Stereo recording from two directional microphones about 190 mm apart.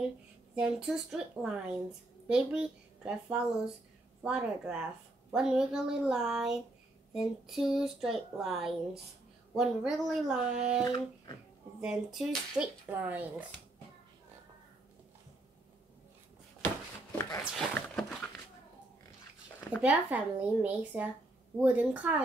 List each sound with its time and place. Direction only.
0.6 s a woman's voice: 5° right (ahead or behind)
10.8 s speech: 20° left (ahead or behind)
11.8 s a woman's voice: 5° right (ahead or behind)
17.6 s a sound: 5° left (ahead or behind)
19.8 s a woman's voice: 5° right (ahead or behind)